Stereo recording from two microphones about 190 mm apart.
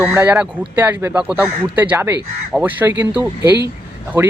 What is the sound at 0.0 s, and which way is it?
Speech, 10° right (ahead or behind).